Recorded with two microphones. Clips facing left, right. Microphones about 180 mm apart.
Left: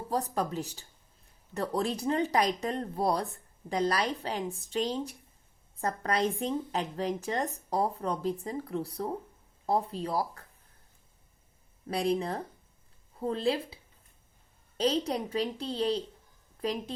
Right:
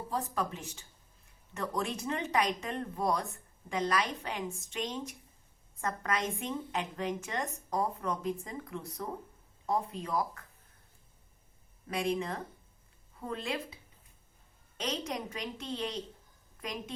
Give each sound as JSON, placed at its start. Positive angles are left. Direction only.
{"t": 0.1, "sound": "speech", "side_deg": 40}
{"t": 11.9, "sound": "speech", "side_deg": 35}
{"t": 14.8, "sound": "a woman's voice", "side_deg": 35}